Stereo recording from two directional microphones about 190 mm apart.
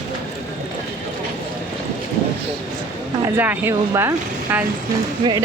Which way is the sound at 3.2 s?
10° right (ahead or behind).